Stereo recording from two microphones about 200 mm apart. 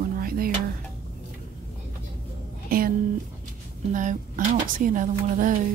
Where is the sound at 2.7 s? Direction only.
45° right (ahead or behind).